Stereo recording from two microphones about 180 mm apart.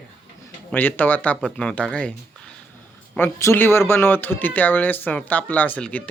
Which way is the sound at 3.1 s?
15° left (ahead or behind).